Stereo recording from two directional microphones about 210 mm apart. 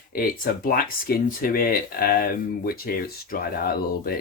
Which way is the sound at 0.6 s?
45° left (ahead or behind).